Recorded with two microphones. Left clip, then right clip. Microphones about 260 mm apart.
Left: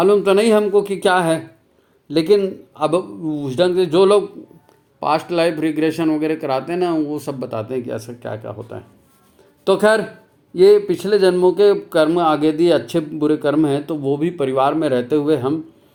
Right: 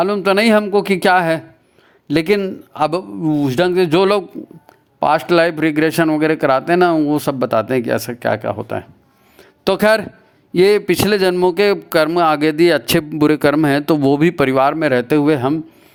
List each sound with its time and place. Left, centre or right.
0.0 s speech: right
9.4 s a sound: right
10.5 s speech: right